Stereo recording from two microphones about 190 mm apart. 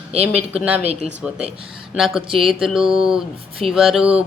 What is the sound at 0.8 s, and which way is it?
Speech, 35° right (ahead or behind).